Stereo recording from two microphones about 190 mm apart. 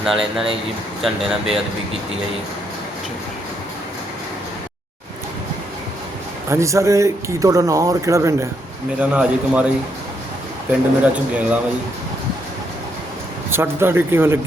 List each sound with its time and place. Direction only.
0.0 s speech: centre (ahead or behind)
6.5 s speech: 15° right (ahead or behind)
10.7 s speech: 5° right (ahead or behind)
13.5 s speech: 10° right (ahead or behind)